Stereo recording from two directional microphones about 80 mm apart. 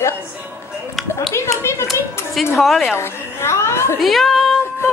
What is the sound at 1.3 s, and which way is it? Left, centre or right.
Speech, left.